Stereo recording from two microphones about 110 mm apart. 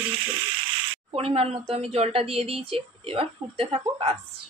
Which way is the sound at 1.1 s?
60° right (ahead or behind).